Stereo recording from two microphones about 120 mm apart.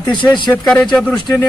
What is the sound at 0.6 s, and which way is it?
Speech, 5° left (ahead or behind).